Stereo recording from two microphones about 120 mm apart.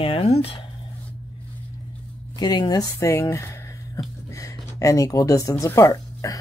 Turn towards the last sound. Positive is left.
turn(degrees=25)  # may be behind; listen again after turning